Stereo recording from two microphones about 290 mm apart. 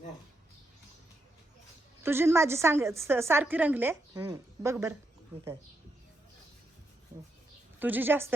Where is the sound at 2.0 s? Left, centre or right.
Centre.